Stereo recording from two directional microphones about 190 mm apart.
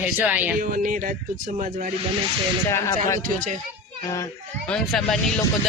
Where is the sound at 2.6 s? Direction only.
15° left (ahead or behind).